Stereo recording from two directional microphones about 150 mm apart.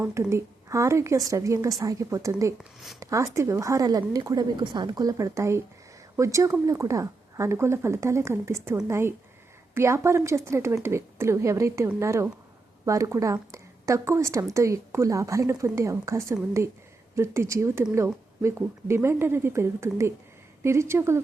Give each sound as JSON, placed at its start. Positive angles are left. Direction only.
{"t": 0.0, "sound": "a woman's voice", "side_deg": -20}
{"t": 2.6, "sound": "speech", "side_deg": 0}
{"t": 3.0, "sound": "a woman's voice", "side_deg": -20}